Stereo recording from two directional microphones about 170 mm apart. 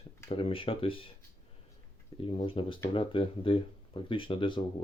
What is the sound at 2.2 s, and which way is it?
Speech, 30° left (ahead or behind).